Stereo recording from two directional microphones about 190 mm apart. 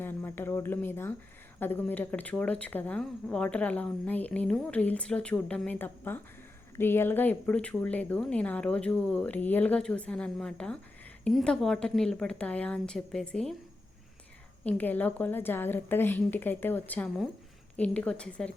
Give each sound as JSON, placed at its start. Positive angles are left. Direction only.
{"t": 0.0, "sound": "a woman's voice", "side_deg": 10}
{"t": 14.6, "sound": "speech", "side_deg": 10}